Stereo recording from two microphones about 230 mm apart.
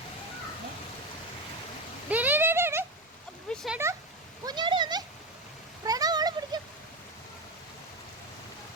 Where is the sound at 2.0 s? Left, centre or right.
Centre.